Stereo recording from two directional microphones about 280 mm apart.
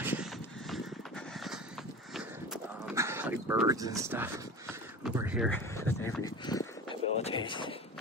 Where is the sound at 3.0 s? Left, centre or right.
Centre.